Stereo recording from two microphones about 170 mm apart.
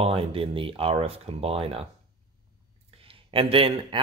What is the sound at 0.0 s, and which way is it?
Speech, 35° right (ahead or behind).